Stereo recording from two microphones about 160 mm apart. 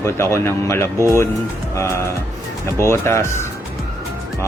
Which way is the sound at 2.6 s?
15° left (ahead or behind).